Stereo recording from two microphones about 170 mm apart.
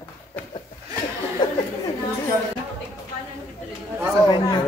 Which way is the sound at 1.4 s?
25° left (ahead or behind).